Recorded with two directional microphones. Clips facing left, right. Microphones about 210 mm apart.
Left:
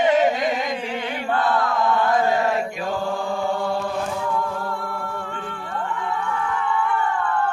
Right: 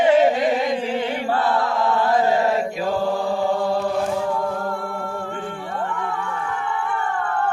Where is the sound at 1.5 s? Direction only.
30° right (ahead or behind).